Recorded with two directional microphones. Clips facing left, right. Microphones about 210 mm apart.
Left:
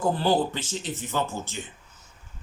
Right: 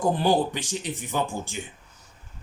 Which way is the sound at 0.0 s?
15° right (ahead or behind).